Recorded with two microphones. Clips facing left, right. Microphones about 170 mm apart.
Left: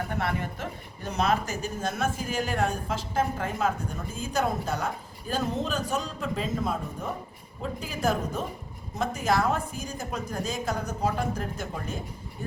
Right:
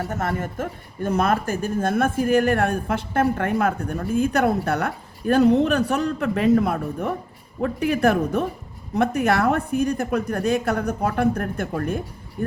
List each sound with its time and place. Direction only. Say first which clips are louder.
0.1 s speech: right 4 dB; 45° right (ahead or behind)